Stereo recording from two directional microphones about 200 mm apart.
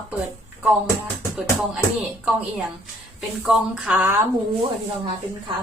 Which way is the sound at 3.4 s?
5° right (ahead or behind).